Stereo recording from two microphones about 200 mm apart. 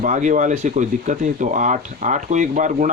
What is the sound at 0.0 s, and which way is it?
Speech, 40° right (ahead or behind).